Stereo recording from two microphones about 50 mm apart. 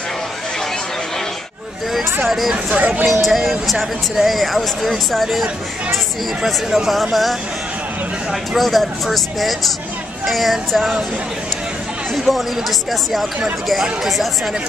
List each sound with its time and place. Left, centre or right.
2.2 s speech: centre
2.5 s speech: right
3.1 s speech: centre
12.3 s speech: centre
14.0 s speech: centre